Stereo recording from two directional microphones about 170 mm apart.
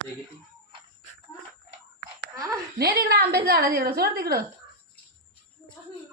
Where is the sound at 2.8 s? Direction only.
65° right (ahead or behind).